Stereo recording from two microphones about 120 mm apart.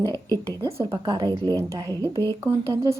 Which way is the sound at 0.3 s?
25° right (ahead or behind).